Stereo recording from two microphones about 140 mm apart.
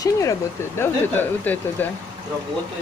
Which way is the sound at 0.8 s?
15° left (ahead or behind).